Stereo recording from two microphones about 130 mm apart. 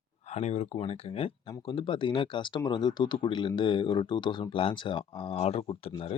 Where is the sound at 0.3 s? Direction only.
60° left (ahead or behind).